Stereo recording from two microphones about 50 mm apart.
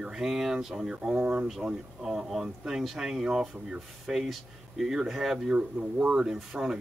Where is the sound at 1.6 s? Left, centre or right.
Centre.